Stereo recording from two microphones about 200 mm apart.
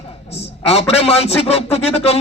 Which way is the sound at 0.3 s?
30° left (ahead or behind).